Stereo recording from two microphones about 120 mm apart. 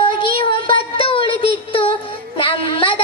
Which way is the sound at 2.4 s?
50° left (ahead or behind).